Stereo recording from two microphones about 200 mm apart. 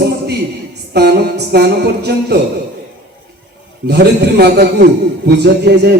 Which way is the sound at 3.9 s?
55° right (ahead or behind).